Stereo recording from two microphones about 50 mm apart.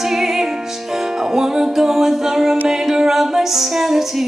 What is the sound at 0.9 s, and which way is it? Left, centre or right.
Music, centre.